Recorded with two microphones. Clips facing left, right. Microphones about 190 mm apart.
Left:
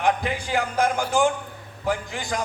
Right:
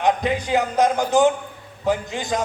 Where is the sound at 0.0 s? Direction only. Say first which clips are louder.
Right 3 dB; 20° right (ahead or behind).